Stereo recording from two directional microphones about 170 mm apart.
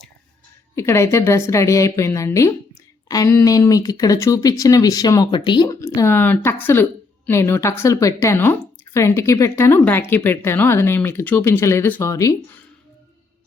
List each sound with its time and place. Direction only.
0.8 s a woman's voice: 15° left (ahead or behind)